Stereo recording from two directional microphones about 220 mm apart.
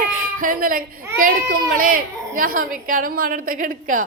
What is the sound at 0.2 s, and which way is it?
Speech, 40° right (ahead or behind).